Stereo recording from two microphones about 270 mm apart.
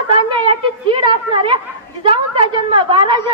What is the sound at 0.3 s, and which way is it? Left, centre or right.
A woman's voice, centre.